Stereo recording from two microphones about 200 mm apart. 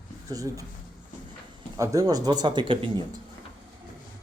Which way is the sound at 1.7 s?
15° right (ahead or behind).